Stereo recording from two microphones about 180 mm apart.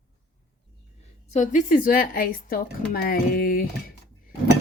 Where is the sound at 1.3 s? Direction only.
45° left (ahead or behind).